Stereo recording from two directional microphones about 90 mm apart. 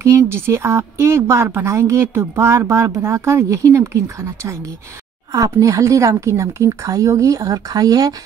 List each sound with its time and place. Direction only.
0.0 s speech: 30° right (ahead or behind)